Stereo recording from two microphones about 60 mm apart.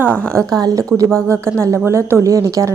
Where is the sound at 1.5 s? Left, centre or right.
Right.